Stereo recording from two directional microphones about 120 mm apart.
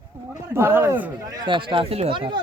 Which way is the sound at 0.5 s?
20° right (ahead or behind).